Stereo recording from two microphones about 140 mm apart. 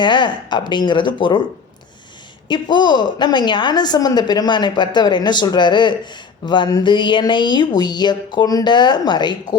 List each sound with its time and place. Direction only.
0.0 s a woman's voice: 35° left (ahead or behind)
2.5 s a woman's voice: 35° left (ahead or behind)